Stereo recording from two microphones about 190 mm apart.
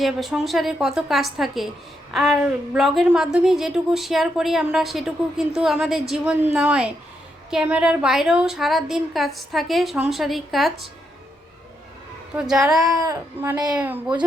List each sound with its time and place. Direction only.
0.0 s a woman's voice: centre (ahead or behind)
12.3 s a woman's voice: 5° right (ahead or behind)
12.9 s speech: 20° right (ahead or behind)